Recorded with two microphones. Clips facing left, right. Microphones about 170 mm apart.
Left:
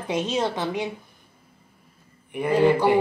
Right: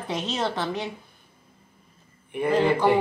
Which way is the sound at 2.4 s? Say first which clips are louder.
Left 2 dB; 10° left (ahead or behind).